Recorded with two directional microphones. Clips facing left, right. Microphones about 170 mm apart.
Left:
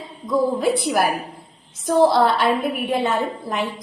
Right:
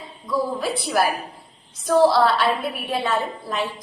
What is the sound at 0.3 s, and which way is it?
A woman's voice, 20° left (ahead or behind).